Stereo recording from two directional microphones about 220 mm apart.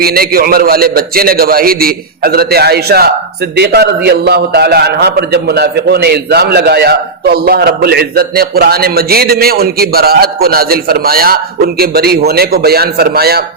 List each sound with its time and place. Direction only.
0.0 s a man's voice: 45° right (ahead or behind)